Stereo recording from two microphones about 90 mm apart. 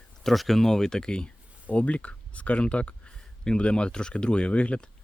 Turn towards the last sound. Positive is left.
turn(degrees=15)  # may be behind; listen again after turning